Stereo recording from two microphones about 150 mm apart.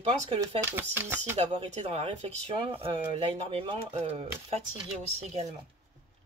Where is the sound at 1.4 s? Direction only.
45° right (ahead or behind).